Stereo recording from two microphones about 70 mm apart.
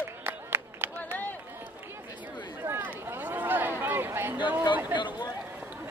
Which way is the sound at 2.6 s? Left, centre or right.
Right.